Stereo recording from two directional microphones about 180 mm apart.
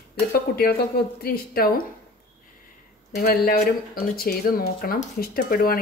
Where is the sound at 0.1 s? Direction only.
55° left (ahead or behind).